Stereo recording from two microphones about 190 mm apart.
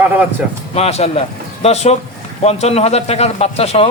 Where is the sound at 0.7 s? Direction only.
35° left (ahead or behind).